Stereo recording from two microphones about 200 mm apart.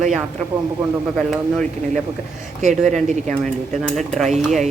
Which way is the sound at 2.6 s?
35° right (ahead or behind).